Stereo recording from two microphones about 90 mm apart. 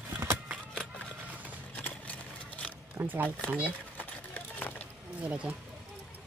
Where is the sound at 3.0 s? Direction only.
20° right (ahead or behind).